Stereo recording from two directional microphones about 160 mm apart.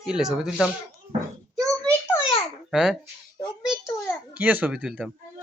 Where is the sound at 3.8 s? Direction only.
20° left (ahead or behind).